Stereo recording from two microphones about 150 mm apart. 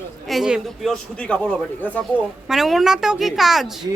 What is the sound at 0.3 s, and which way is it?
A woman's voice, centre (ahead or behind).